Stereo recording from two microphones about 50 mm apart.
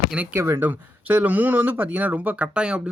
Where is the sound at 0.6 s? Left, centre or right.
Right.